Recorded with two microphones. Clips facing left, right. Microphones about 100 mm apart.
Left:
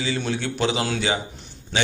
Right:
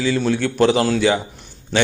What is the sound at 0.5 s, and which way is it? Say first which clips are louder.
Speech: right 9 dB; 45° right (ahead or behind).